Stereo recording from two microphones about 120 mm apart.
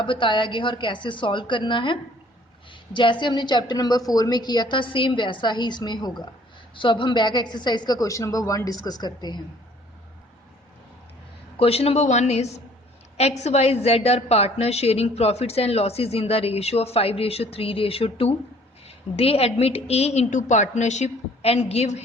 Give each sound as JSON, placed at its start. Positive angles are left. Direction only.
{"t": 0.0, "sound": "a woman's voice", "side_deg": 40}
{"t": 11.5, "sound": "a woman's voice", "side_deg": 55}